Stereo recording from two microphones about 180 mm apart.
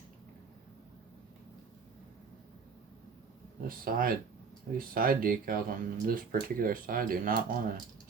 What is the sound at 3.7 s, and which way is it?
Speech, 50° right (ahead or behind).